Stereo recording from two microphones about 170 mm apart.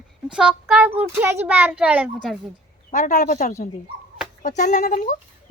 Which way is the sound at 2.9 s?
45° left (ahead or behind).